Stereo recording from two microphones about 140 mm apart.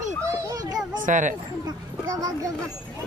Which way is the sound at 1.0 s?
65° right (ahead or behind).